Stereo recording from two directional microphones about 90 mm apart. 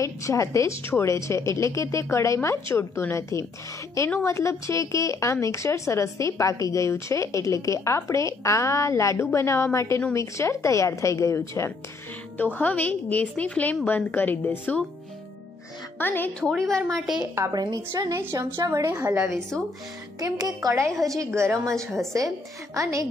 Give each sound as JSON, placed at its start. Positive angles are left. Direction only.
{"t": 0.0, "sound": "a woman's voice", "side_deg": 35}
{"t": 12.4, "sound": "a woman's voice", "side_deg": 20}
{"t": 16.0, "sound": "a woman's voice", "side_deg": 20}
{"t": 16.3, "sound": "a woman's voice", "side_deg": 10}
{"t": 17.0, "sound": "a woman's voice", "side_deg": -5}
{"t": 17.4, "sound": "a woman's voice", "side_deg": -45}
{"t": 20.2, "sound": "a woman's voice", "side_deg": -45}
{"t": 20.7, "sound": "a woman's voice", "side_deg": -30}
{"t": 22.8, "sound": "a woman's voice", "side_deg": -35}